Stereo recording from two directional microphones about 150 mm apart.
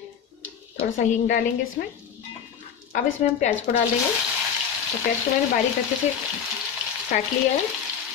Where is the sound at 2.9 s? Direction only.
65° left (ahead or behind).